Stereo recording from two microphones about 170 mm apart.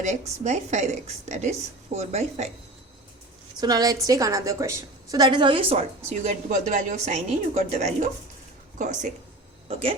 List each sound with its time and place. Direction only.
0.0 s a woman's voice: 45° right (ahead or behind)
3.6 s a woman's voice: 25° right (ahead or behind)
6.1 s a woman's voice: 45° right (ahead or behind)